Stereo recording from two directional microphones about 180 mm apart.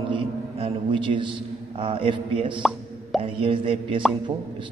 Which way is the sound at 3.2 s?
30° right (ahead or behind).